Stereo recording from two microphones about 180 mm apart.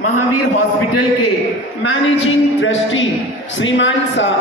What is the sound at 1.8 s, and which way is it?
A man's voice, 90° left.